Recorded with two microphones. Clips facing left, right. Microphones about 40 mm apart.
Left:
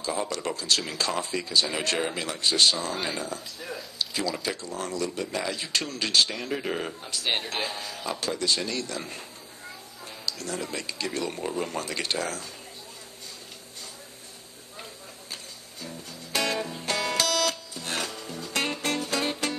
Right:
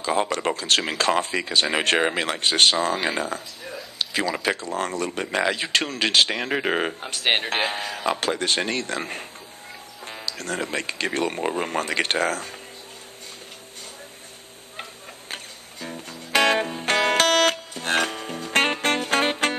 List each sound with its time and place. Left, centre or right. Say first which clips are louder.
0.1 s speech: right 7 dB; right
4.5 s speech: right 7 dB; right
10.3 s speech: right 7 dB; right
15.3 s music: right 6 dB; right